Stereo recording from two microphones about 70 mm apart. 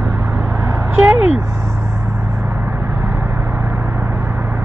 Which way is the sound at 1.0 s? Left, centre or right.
Right.